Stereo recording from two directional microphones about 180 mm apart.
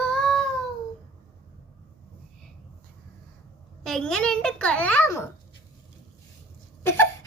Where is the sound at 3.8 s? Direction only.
Centre (ahead or behind).